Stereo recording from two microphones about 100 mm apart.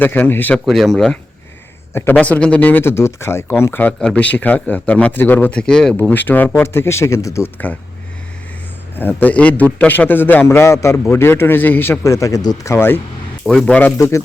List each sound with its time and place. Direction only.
0.0 s a man's voice: 20° left (ahead or behind)
0.5 s speech: centre (ahead or behind)
1.9 s a man's voice: 20° left (ahead or behind)
9.0 s a man's voice: 20° left (ahead or behind)
12.0 s speech: 30° left (ahead or behind)
12.6 s a man's voice: 25° left (ahead or behind)
13.5 s speech: 10° left (ahead or behind)